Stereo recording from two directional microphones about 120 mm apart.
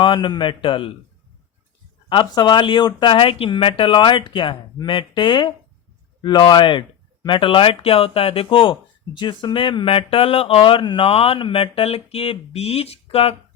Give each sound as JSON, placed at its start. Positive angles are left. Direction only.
{"t": 0.0, "sound": "speech", "side_deg": 40}
{"t": 2.0, "sound": "speech", "side_deg": 40}